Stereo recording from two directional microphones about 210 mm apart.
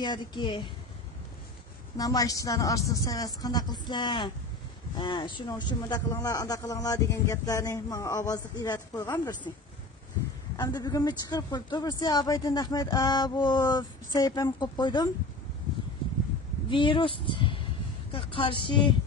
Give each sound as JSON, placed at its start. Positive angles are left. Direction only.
{"t": 0.0, "sound": "a man's voice", "side_deg": 20}
{"t": 2.0, "sound": "a man's voice", "side_deg": 15}
{"t": 10.5, "sound": "a man's voice", "side_deg": 20}
{"t": 16.6, "sound": "a man's voice", "side_deg": 25}